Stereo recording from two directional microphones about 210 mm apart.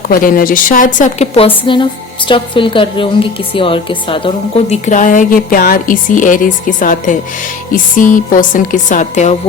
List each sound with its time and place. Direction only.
0.1 s a woman's voice: 45° left (ahead or behind)